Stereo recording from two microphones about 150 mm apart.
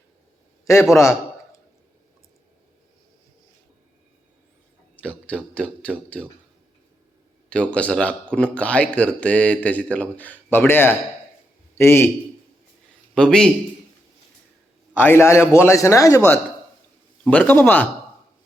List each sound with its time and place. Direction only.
0.6 s a man's voice: 20° left (ahead or behind)
5.0 s a sound: 10° left (ahead or behind)
7.5 s a man's voice: 5° left (ahead or behind)
13.1 s a man's voice: 5° left (ahead or behind)
14.9 s speech: 15° left (ahead or behind)